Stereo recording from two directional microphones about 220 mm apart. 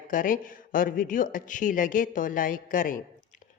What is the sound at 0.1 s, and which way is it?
A woman's voice, 40° left (ahead or behind).